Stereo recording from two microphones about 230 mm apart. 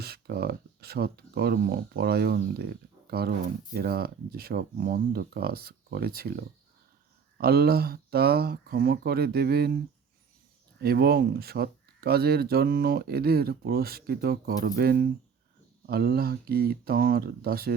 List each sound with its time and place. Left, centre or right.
0.0 s speech: right